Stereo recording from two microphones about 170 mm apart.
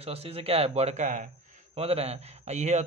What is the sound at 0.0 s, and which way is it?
Speech, 35° right (ahead or behind).